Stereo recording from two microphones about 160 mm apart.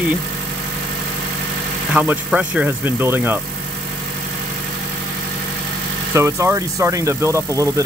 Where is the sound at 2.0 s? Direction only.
5° right (ahead or behind).